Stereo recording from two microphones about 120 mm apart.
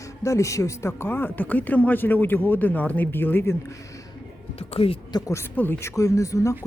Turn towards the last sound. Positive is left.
turn(degrees=25)  # may be behind; listen again after turning